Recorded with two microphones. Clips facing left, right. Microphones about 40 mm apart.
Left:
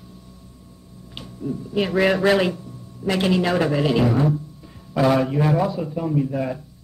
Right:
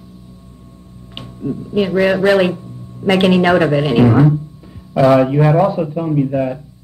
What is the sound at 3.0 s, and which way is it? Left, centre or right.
Speech, right.